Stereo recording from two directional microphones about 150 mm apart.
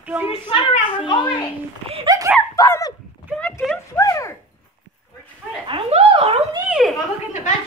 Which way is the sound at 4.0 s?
20° left (ahead or behind).